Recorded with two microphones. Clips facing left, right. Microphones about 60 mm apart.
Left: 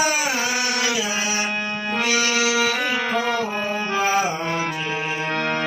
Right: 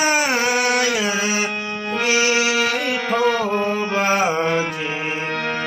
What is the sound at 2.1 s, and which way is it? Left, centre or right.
Music, right.